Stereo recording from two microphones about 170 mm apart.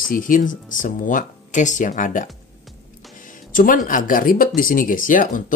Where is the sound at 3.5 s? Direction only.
55° left (ahead or behind).